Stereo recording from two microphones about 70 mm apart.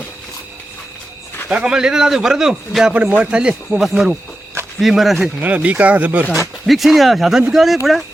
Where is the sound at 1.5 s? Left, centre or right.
Centre.